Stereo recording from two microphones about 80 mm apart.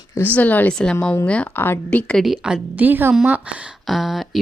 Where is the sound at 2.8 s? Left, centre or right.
Right.